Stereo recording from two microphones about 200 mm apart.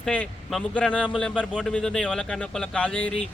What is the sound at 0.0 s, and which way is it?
Speech, 5° left (ahead or behind).